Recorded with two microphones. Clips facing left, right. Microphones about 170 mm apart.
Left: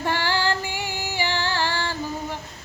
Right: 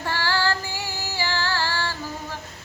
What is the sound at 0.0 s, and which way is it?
Female singing, 20° left (ahead or behind).